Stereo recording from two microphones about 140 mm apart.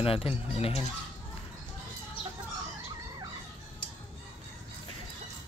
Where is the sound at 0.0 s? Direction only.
40° left (ahead or behind).